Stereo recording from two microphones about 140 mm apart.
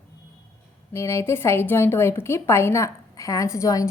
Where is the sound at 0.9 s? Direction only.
20° left (ahead or behind).